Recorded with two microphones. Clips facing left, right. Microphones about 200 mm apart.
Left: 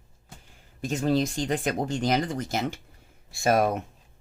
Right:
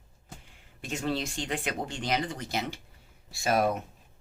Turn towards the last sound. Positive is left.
turn(degrees=50)  # may be behind; listen again after turning